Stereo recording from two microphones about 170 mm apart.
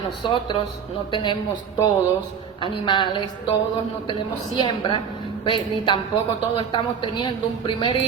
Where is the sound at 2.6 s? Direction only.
30° left (ahead or behind).